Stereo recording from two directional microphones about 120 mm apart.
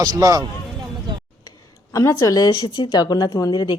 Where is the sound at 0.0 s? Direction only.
30° right (ahead or behind).